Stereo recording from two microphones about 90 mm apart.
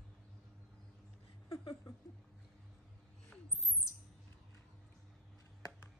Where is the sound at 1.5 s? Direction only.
40° left (ahead or behind).